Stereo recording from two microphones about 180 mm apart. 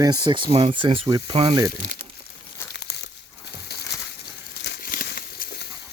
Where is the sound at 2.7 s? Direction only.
70° left (ahead or behind).